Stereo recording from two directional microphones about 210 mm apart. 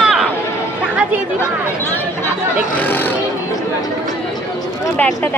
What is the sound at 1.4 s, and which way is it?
Speech, 10° left (ahead or behind).